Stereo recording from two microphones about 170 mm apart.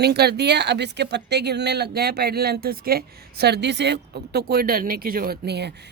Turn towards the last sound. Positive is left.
turn(degrees=-75)  # may be behind; listen again after turning